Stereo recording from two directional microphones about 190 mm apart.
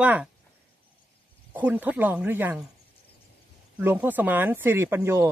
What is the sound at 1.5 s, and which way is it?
Speech, 10° right (ahead or behind).